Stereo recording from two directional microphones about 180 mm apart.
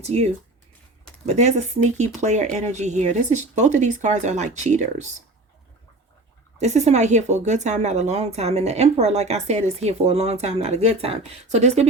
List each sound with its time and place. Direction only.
0.0 s speech: 35° right (ahead or behind)
1.4 s speech: 40° right (ahead or behind)
6.6 s speech: 40° right (ahead or behind)